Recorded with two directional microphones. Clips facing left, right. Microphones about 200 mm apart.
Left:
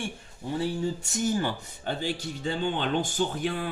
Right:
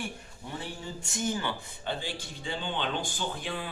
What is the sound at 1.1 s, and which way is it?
Speech, 40° left (ahead or behind).